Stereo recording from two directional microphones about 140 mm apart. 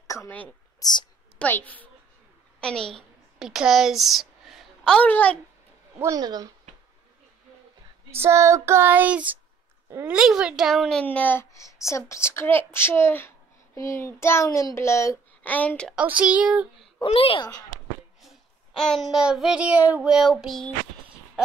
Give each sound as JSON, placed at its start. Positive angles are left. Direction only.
{"t": 0.0, "sound": "a sound", "side_deg": 20}
{"t": 0.7, "sound": "speech", "side_deg": 30}
{"t": 1.4, "sound": "a woman's voice", "side_deg": 10}
{"t": 5.9, "sound": "speech", "side_deg": -25}
{"t": 8.2, "sound": "child singing", "side_deg": -20}
{"t": 9.8, "sound": "speech", "side_deg": -20}
{"t": 10.1, "sound": "a child's voice", "side_deg": -5}
{"t": 16.2, "sound": "child singing", "side_deg": -10}
{"t": 16.8, "sound": "a child's voice", "side_deg": 40}
{"t": 18.2, "sound": "child singing", "side_deg": 0}